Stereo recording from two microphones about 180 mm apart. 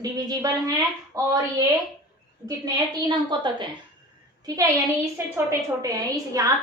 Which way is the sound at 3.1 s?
25° right (ahead or behind).